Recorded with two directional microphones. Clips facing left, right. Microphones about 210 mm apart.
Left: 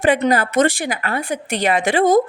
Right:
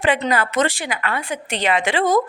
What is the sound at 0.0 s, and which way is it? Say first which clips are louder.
A woman's voice: left 4 dB; 45° left (ahead or behind).